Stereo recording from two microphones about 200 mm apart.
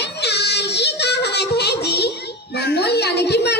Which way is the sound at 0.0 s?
55° left (ahead or behind).